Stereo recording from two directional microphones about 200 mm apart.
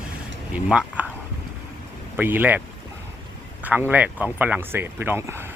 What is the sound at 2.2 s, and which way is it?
Speech, 10° right (ahead or behind).